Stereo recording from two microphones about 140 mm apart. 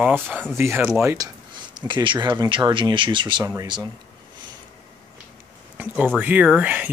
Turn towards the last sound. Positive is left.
turn(degrees=-10)  # may be behind; listen again after turning